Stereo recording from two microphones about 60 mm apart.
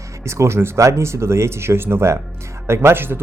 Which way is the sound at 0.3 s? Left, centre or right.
Right.